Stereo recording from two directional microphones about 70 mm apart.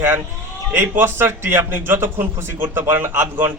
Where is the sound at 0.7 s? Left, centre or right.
Right.